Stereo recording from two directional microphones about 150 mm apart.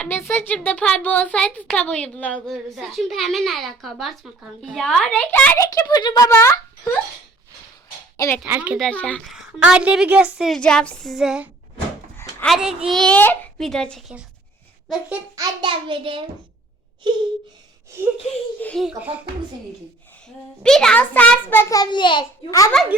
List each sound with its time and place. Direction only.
0.0 s a woman's voice: 15° left (ahead or behind)
5.6 s a child's voice: 25° left (ahead or behind)
8.1 s a sound: 20° left (ahead or behind)
8.4 s a child's voice: 10° right (ahead or behind)
8.8 s a woman's voice: 10° left (ahead or behind)
10.6 s a woman's voice: 5° left (ahead or behind)
12.1 s a sound: 15° left (ahead or behind)
12.5 s a woman's voice: 5° right (ahead or behind)
15.6 s a child's voice: 35° right (ahead or behind)
18.6 s a woman's voice: 5° left (ahead or behind)
18.9 s a child's voice: 10° right (ahead or behind)
20.6 s speech: 5° left (ahead or behind); by 22.7 s 25° left (ahead or behind)